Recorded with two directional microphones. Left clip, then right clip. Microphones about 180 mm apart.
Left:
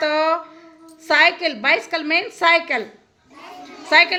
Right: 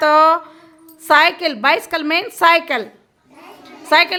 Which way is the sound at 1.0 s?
20° right (ahead or behind).